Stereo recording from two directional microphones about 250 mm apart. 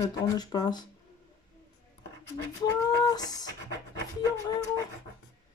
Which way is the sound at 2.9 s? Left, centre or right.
Centre.